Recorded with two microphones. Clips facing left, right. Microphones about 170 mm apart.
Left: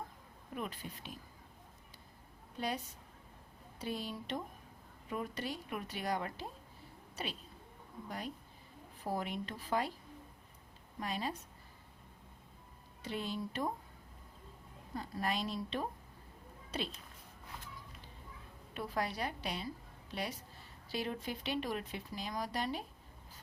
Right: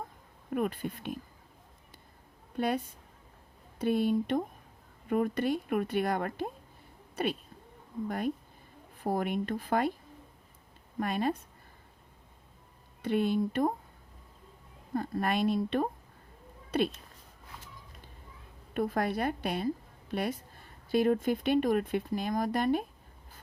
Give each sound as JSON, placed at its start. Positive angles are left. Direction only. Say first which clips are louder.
{"t": 0.5, "sound": "a woman's voice", "louder": "right 11 dB", "side_deg": -55}
{"t": 2.6, "sound": "a woman's voice", "louder": "right 8 dB", "side_deg": -55}
{"t": 11.0, "sound": "a woman's voice", "louder": "right 9 dB", "side_deg": -55}
{"t": 13.0, "sound": "a woman's voice", "louder": "right 12 dB", "side_deg": -60}
{"t": 14.9, "sound": "a woman's voice", "louder": "right 8 dB", "side_deg": -55}
{"t": 18.7, "sound": "a woman's voice", "louder": "right 8 dB", "side_deg": -55}